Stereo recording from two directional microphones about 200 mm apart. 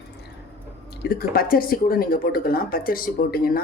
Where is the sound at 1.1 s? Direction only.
50° left (ahead or behind).